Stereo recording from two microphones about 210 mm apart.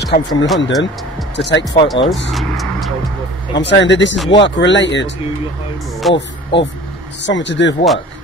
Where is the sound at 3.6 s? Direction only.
55° left (ahead or behind).